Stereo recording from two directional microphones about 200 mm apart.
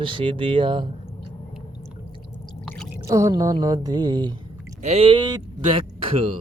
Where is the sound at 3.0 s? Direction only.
15° right (ahead or behind).